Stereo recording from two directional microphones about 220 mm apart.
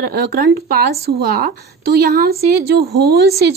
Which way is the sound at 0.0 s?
40° right (ahead or behind).